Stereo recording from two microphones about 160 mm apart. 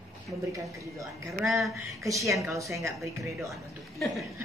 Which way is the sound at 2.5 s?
20° right (ahead or behind).